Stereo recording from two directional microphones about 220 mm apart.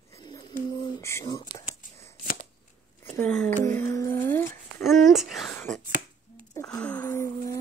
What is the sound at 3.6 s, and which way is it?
Music, 10° left (ahead or behind).